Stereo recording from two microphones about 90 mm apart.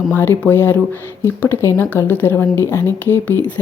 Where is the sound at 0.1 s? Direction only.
20° left (ahead or behind).